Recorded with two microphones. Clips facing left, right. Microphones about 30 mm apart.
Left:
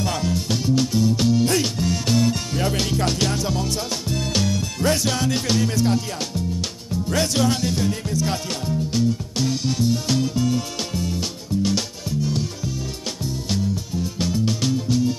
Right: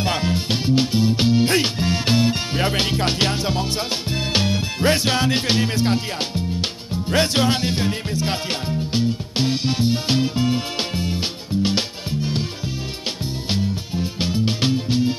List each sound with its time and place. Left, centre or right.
0.0 s music: right
13.5 s music: right